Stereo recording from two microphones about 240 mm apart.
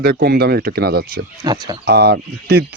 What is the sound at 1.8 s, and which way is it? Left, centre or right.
Speech, right.